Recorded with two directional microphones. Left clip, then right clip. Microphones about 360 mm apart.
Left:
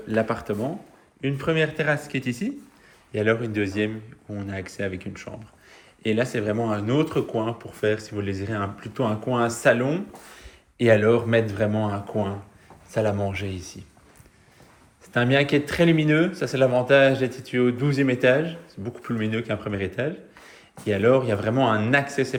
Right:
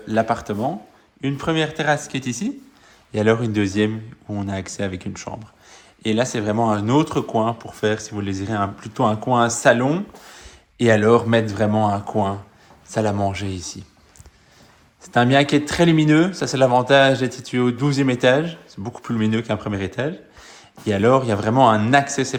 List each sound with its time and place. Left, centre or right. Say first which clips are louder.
0.1 s speech: right 4 dB; centre
15.0 s speech: right 5 dB; centre